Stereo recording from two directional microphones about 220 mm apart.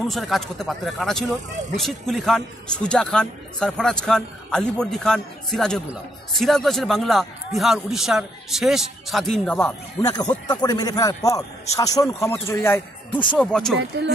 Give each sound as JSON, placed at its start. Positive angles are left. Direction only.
{"t": 0.1, "sound": "a man's voice", "side_deg": 0}